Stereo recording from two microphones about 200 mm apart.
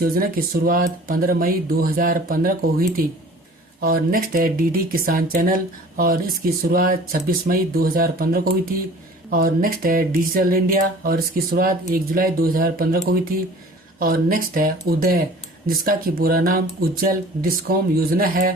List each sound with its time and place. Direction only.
0.0 s speech: 45° right (ahead or behind)
14.0 s speech: 45° right (ahead or behind)